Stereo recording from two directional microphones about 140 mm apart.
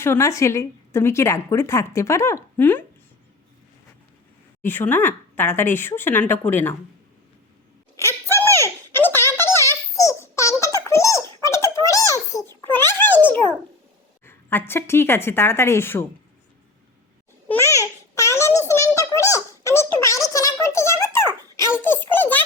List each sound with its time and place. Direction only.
0.0 s a woman's voice: 20° left (ahead or behind)
4.6 s a woman's voice: 15° left (ahead or behind)
7.9 s a sound: 15° left (ahead or behind)
14.3 s a woman's voice: 15° left (ahead or behind)
17.5 s babbling: 20° left (ahead or behind)
18.9 s a sound: 20° left (ahead or behind)